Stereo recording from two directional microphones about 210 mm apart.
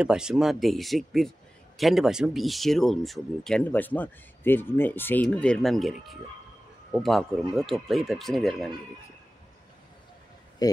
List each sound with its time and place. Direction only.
0.0 s speech: 5° right (ahead or behind)
10.6 s speech: 20° left (ahead or behind)